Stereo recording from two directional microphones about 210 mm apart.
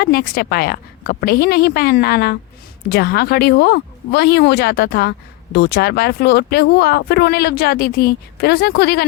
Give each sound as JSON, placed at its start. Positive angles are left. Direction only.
{"t": 0.0, "sound": "speech", "side_deg": 45}